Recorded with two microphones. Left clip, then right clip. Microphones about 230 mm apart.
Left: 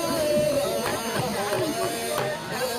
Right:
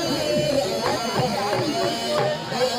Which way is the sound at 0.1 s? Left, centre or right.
Left.